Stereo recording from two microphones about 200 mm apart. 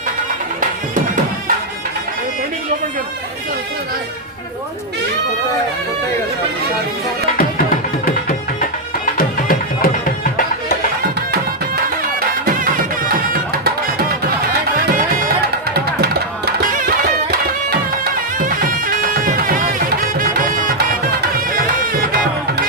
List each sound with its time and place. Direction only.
7.3 s music: 45° left (ahead or behind)
14.8 s music: 45° right (ahead or behind)
18.3 s music: 45° right (ahead or behind)